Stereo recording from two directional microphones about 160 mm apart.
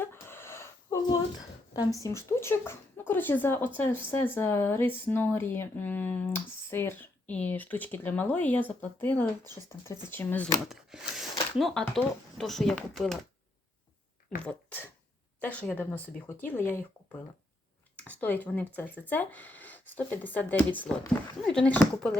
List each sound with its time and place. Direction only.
0.0 s a sound: 15° left (ahead or behind)
1.7 s speech: 20° left (ahead or behind)
9.5 s speech: 25° right (ahead or behind)
9.8 s speech: 15° left (ahead or behind)
10.7 s speech: 5° right (ahead or behind)
14.4 s speech: 10° left (ahead or behind)